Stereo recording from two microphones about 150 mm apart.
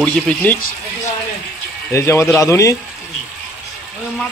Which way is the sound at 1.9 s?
20° left (ahead or behind).